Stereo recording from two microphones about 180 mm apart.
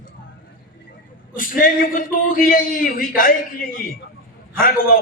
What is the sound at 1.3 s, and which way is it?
A man's voice, 50° left (ahead or behind).